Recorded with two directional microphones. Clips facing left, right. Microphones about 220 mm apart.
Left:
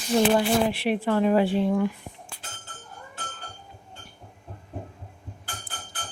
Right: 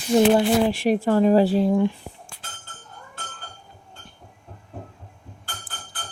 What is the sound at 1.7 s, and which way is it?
Speech, 25° right (ahead or behind).